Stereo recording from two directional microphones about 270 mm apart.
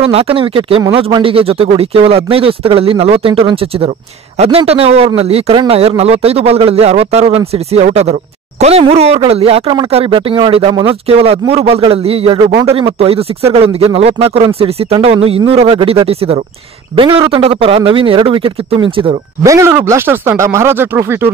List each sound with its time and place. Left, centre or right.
0.0 s a man's voice: right